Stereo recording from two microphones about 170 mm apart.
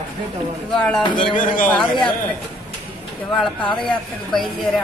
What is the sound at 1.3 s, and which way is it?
Speech, 50° left (ahead or behind).